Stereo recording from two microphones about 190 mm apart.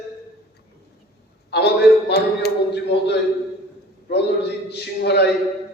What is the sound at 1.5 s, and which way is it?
A man's voice, 60° left (ahead or behind).